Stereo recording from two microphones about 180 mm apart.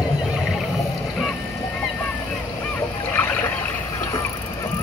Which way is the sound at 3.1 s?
10° left (ahead or behind).